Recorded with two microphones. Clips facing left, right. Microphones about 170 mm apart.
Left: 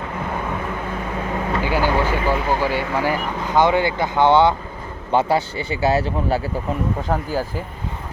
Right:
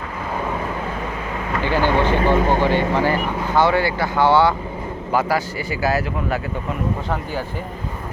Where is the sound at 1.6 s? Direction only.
10° left (ahead or behind).